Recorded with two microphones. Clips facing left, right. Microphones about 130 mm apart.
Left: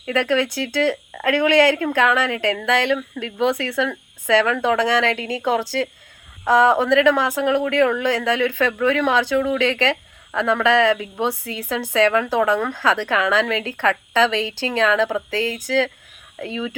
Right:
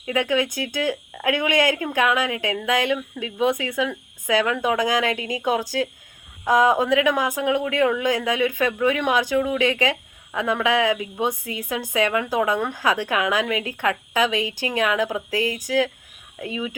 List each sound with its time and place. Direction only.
0.1 s speech: 15° right (ahead or behind)